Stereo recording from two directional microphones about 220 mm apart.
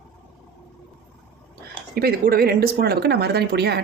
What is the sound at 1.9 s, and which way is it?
Speech, 45° right (ahead or behind).